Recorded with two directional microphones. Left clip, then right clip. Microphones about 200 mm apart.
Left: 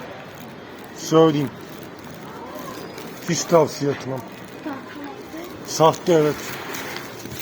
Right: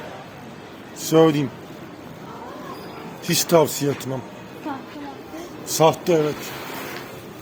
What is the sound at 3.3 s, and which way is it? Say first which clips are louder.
Speech: even; 25° right (ahead or behind).